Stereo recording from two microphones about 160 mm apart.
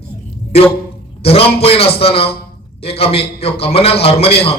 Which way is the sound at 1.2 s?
40° left (ahead or behind).